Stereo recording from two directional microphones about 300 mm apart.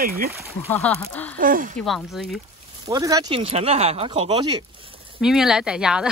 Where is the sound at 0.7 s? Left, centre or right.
Centre.